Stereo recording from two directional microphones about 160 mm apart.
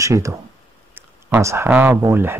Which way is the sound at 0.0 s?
20° right (ahead or behind).